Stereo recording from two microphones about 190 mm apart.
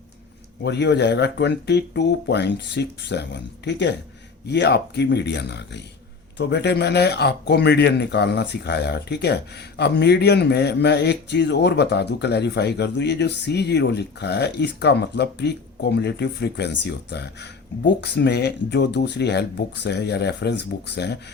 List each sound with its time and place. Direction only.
0.6 s speech: 65° left (ahead or behind)